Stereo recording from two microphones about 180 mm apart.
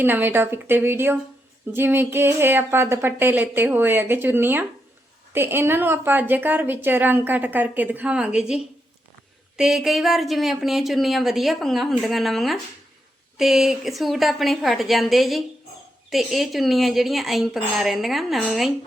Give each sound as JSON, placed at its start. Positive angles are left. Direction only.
{"t": 0.0, "sound": "a woman's voice", "side_deg": -10}